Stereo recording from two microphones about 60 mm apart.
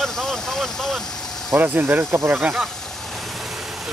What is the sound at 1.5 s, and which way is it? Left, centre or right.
Speech, right.